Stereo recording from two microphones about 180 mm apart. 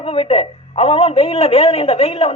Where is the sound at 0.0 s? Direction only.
30° left (ahead or behind).